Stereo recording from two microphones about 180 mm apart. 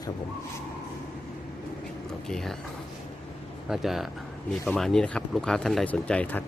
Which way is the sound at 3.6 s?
Centre (ahead or behind).